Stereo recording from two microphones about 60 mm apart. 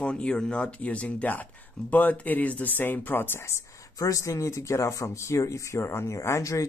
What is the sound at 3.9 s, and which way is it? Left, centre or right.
Speech, left.